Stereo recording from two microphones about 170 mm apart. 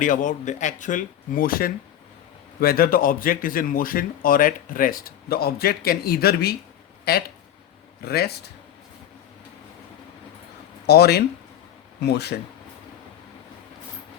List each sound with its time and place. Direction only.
0.0 s a man's voice: 50° left (ahead or behind); by 8.4 s 65° left (ahead or behind)
10.8 s speech: 70° left (ahead or behind)